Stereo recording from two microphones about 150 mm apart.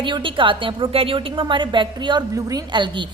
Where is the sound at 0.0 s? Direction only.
35° right (ahead or behind).